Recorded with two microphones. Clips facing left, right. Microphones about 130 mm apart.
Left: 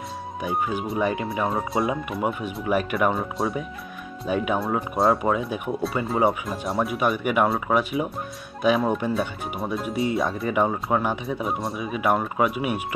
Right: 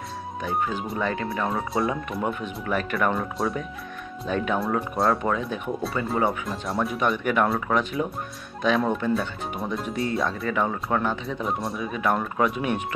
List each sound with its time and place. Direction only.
0.4 s speech: 10° left (ahead or behind)
1.3 s speech: centre (ahead or behind)
6.0 s speech: 15° left (ahead or behind)
6.4 s speech: 5° left (ahead or behind)
10.4 s speech: 15° left (ahead or behind)
11.2 s speech: 5° left (ahead or behind)